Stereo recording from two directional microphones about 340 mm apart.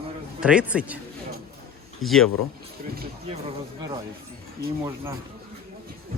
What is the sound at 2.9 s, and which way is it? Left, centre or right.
Speech, right.